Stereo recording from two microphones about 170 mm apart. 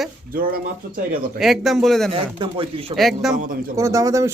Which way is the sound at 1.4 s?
Centre (ahead or behind).